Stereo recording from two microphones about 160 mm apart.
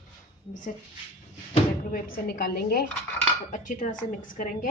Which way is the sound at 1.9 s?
65° left (ahead or behind).